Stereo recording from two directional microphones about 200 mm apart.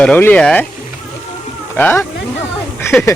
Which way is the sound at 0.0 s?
5° left (ahead or behind).